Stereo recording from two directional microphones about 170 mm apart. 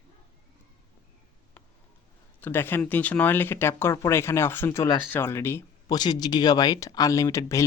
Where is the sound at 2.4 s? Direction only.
10° left (ahead or behind).